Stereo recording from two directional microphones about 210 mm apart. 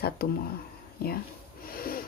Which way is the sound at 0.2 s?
45° left (ahead or behind).